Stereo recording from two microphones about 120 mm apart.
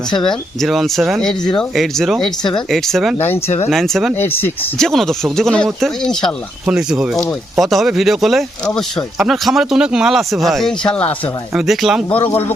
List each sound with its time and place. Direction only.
0.2 s speech: 5° left (ahead or behind)
3.2 s speech: 20° left (ahead or behind)
3.7 s speech: centre (ahead or behind)
4.1 s speech: 20° left (ahead or behind)
4.8 s speech: 5° left (ahead or behind)
6.7 s speech: 10° right (ahead or behind)
12.1 s speech: 15° left (ahead or behind)